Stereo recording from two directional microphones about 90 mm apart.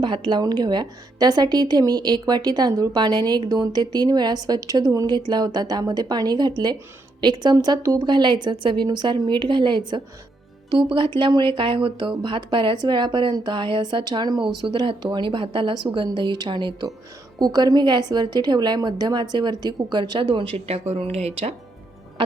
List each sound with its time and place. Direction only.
0.3 s a woman's voice: 50° right (ahead or behind)
7.5 s speech: 45° right (ahead or behind)
17.4 s a woman's voice: 45° right (ahead or behind); by 20.6 s 65° right (ahead or behind)